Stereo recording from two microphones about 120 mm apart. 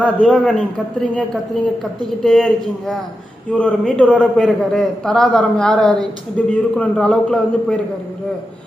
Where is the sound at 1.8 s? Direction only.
5° left (ahead or behind).